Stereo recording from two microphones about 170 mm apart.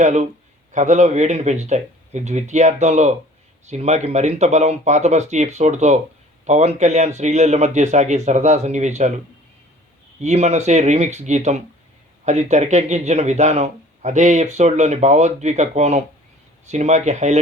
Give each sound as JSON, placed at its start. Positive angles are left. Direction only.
{"t": 0.0, "sound": "speech", "side_deg": -45}
{"t": 10.2, "sound": "speech", "side_deg": -40}